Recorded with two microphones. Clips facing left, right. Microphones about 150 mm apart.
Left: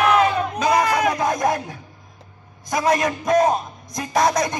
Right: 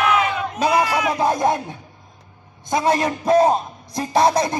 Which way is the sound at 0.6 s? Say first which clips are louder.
Right 1 dB; 30° right (ahead or behind).